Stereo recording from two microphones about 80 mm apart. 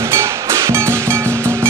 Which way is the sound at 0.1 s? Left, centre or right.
Right.